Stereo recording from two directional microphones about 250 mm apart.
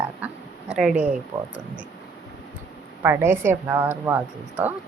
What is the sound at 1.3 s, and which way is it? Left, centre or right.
Speech, centre.